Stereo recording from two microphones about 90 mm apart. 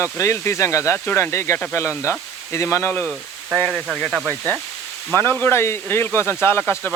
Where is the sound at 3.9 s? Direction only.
5° left (ahead or behind).